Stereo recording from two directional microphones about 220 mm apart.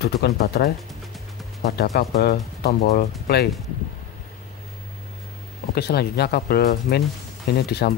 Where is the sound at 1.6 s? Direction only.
45° left (ahead or behind).